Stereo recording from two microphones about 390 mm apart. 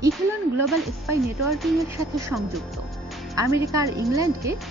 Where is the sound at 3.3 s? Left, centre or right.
Centre.